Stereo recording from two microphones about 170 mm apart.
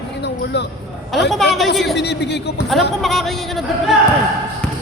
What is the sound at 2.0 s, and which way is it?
Speech, 85° left.